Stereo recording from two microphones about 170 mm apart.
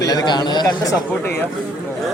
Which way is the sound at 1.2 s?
15° left (ahead or behind).